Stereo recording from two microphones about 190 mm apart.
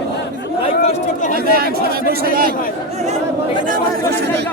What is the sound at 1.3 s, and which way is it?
Chatter, 55° right (ahead or behind).